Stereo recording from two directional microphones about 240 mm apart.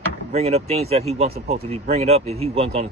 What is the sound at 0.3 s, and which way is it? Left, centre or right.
Speech, right.